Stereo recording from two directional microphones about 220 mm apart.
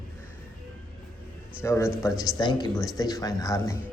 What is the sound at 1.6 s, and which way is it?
A man's voice, 10° left (ahead or behind).